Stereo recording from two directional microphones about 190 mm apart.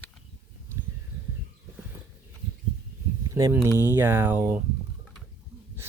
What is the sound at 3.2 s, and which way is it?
Speech, 15° right (ahead or behind).